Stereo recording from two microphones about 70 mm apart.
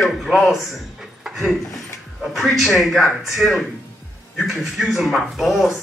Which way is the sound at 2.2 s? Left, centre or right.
Centre.